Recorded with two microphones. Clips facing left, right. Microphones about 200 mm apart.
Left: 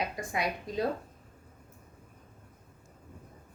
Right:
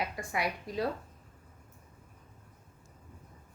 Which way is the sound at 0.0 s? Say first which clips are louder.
Left 1 dB; 20° left (ahead or behind).